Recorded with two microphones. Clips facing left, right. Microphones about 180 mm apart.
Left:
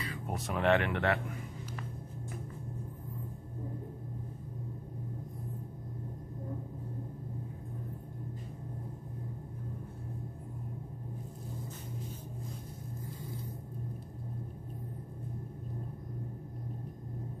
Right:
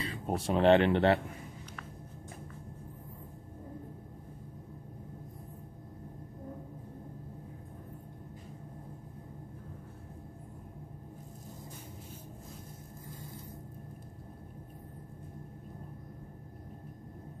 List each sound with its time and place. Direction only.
0.0 s speech: 30° right (ahead or behind)